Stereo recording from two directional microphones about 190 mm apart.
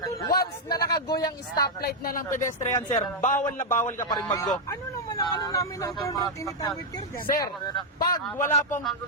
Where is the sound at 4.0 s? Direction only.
20° left (ahead or behind).